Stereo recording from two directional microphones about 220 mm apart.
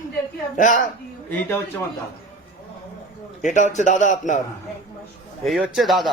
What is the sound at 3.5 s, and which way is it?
Speech, 35° left (ahead or behind).